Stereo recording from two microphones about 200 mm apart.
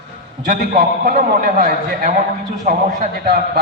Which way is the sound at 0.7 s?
45° right (ahead or behind).